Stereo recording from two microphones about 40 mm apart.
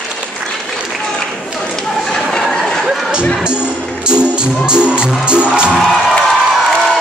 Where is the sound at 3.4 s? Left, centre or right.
Right.